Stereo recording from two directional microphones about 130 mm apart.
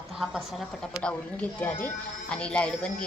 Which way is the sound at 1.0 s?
10° left (ahead or behind).